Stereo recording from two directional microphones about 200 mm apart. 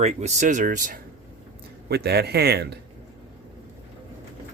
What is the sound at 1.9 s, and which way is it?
Speech, 55° right (ahead or behind).